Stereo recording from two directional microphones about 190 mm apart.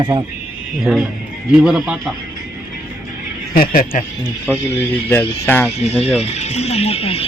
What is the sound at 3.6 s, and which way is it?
Speech, 50° left (ahead or behind).